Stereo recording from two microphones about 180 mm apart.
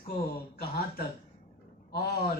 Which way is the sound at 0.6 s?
55° left (ahead or behind).